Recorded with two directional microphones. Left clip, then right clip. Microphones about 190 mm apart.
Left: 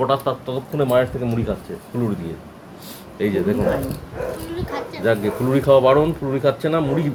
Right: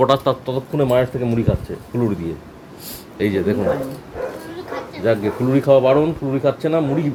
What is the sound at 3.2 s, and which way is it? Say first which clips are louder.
Speech: right 1 dB; 35° right (ahead or behind).